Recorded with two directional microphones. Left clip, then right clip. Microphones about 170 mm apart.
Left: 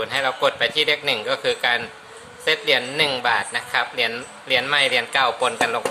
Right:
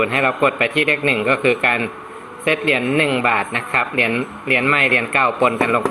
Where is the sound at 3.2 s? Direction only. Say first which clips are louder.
Right 3 dB; 15° left (ahead or behind).